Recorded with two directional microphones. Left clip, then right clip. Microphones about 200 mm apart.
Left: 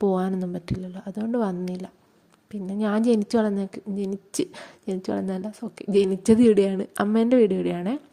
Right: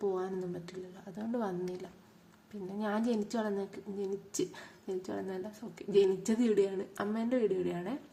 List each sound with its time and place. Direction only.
0.0 s a woman's voice: 45° left (ahead or behind)